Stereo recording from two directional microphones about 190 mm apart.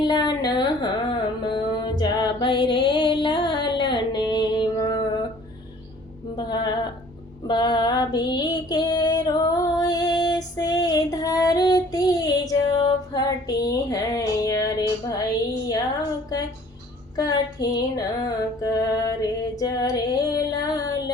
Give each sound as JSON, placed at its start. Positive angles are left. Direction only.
{"t": 0.0, "sound": "music", "side_deg": 20}
{"t": 6.3, "sound": "music", "side_deg": 20}
{"t": 7.4, "sound": "female singing", "side_deg": 20}
{"t": 17.2, "sound": "music", "side_deg": 20}
{"t": 18.6, "sound": "mantra", "side_deg": 20}
{"t": 19.5, "sound": "female singing", "side_deg": 20}